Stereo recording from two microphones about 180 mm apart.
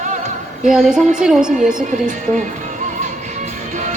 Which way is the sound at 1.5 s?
45° right (ahead or behind).